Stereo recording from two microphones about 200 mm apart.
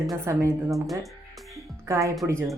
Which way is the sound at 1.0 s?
Centre (ahead or behind).